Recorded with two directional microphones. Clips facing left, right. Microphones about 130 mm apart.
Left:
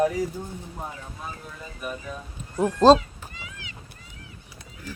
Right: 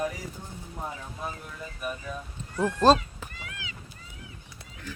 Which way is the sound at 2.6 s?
15° left (ahead or behind).